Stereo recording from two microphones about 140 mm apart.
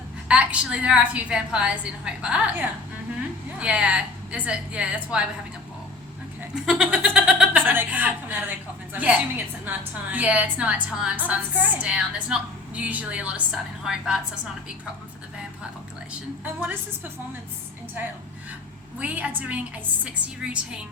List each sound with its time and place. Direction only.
0.3 s speech: 10° right (ahead or behind)
6.7 s speech: 5° right (ahead or behind)
16.4 s speech: 10° right (ahead or behind)
18.9 s speech: 10° right (ahead or behind)